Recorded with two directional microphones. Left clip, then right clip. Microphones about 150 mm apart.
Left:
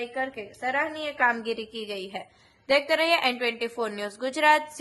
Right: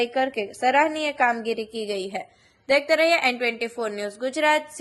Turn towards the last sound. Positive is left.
turn(degrees=-10)  # may be behind; listen again after turning